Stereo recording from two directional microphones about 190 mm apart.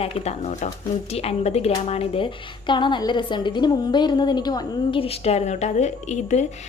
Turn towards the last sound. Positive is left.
turn(degrees=35)  # may be behind; listen again after turning